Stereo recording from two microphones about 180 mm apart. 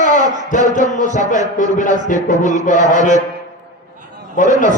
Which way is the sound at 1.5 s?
45° left (ahead or behind).